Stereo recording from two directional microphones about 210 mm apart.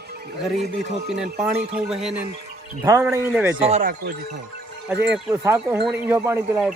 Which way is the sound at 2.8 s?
15° right (ahead or behind).